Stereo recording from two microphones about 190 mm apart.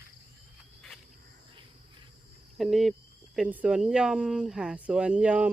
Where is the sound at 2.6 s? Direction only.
Centre (ahead or behind).